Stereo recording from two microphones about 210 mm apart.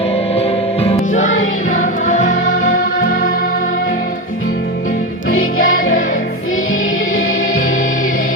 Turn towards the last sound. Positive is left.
turn(degrees=40)  # may be behind; listen again after turning